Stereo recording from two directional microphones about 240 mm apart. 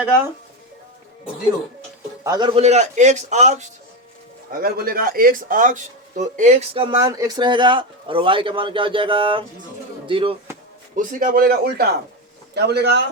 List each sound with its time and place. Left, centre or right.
2.2 s a man's voice: centre
10.9 s a man's voice: right